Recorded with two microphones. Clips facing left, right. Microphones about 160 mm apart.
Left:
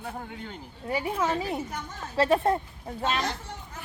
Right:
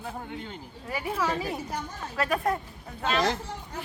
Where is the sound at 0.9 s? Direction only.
25° left (ahead or behind).